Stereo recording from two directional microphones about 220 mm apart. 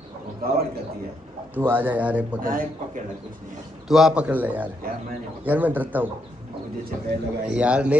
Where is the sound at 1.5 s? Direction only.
10° right (ahead or behind).